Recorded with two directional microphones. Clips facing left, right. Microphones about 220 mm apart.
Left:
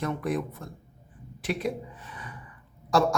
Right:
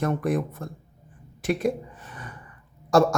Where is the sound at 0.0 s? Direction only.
50° right (ahead or behind).